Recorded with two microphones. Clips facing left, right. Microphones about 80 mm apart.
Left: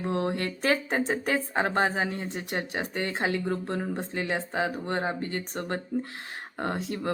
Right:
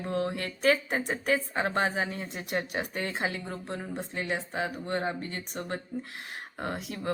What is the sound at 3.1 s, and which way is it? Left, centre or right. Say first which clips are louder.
A woman's voice: left 5 dB; left.